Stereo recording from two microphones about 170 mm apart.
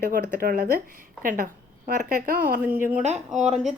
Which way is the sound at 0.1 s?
55° right (ahead or behind).